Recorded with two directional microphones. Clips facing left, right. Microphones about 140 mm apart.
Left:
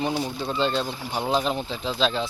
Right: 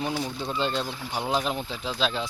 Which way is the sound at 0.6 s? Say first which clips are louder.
Left 4 dB; 15° right (ahead or behind).